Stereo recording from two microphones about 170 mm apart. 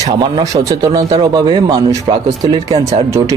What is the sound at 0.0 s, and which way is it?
Speech, 25° right (ahead or behind).